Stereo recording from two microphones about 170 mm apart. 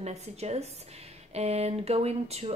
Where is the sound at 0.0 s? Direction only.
40° right (ahead or behind).